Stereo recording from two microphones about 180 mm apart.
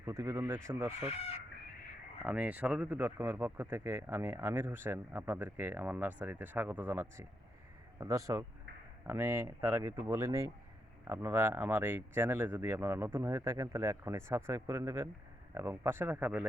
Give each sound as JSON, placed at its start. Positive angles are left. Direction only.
{"t": 0.0, "sound": "speech", "side_deg": -15}
{"t": 2.2, "sound": "speech", "side_deg": -5}